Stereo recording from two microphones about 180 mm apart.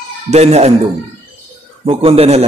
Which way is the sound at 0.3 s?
35° right (ahead or behind).